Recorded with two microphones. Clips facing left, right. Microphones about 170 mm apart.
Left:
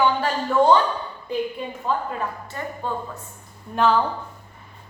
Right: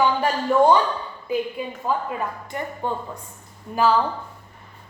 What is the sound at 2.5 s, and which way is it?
Speech, 20° right (ahead or behind).